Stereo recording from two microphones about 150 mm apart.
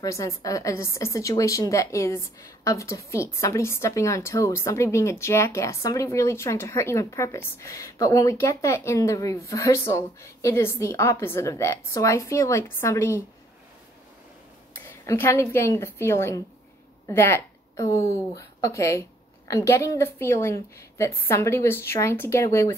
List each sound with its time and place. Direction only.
0.0 s speech: 20° left (ahead or behind)
14.9 s a woman's voice: 20° left (ahead or behind)